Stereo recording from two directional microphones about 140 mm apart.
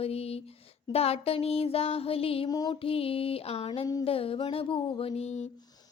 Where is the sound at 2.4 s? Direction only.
30° left (ahead or behind).